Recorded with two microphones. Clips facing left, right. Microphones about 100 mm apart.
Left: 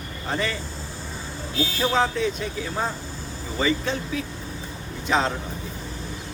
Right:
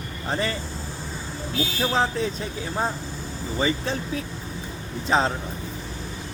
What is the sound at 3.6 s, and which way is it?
Speech, 35° right (ahead or behind).